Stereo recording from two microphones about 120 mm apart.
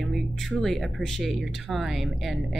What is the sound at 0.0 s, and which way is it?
A woman's voice, centre (ahead or behind).